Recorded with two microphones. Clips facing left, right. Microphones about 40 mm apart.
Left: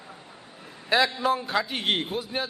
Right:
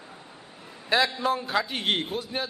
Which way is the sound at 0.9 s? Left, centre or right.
Centre.